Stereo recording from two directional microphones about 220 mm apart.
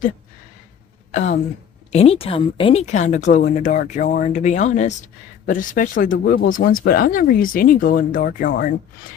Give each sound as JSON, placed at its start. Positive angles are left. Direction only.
{"t": 1.1, "sound": "a woman's voice", "side_deg": 30}